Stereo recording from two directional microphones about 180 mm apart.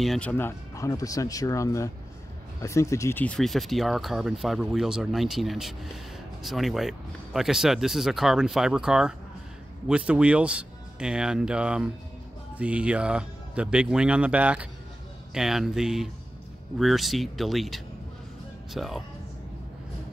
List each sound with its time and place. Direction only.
0.0 s speech: 5° left (ahead or behind)